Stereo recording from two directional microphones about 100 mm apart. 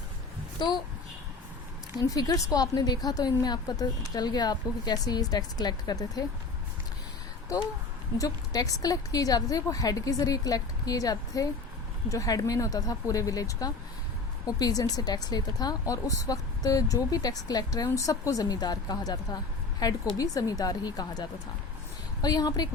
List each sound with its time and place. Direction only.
2.0 s speech: 40° left (ahead or behind)
8.2 s speech: 35° left (ahead or behind)